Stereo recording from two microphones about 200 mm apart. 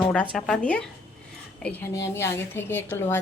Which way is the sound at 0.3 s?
Centre (ahead or behind).